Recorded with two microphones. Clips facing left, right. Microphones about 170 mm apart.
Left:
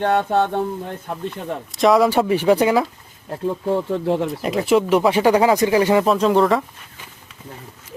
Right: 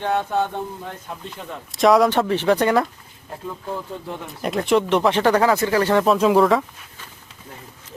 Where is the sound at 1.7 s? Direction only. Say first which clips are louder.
Even; centre (ahead or behind).